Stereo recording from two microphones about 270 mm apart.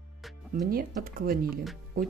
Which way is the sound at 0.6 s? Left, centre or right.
Right.